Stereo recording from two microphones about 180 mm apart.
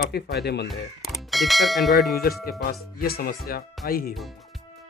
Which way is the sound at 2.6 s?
55° left (ahead or behind).